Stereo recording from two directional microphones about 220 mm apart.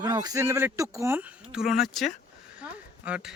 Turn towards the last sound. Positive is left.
turn(degrees=-5)  # may be behind; listen again after turning